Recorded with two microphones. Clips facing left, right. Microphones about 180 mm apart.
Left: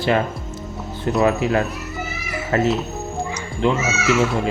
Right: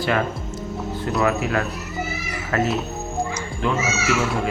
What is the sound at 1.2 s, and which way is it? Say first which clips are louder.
Speech: left 3 dB; 25° left (ahead or behind).